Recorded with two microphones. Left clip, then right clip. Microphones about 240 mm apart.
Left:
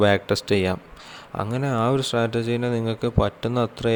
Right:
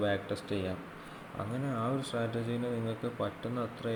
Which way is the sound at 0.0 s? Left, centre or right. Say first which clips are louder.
Left 13 dB; left.